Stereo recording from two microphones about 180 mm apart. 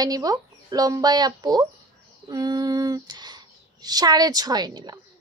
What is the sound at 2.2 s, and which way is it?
Female singing, 20° right (ahead or behind).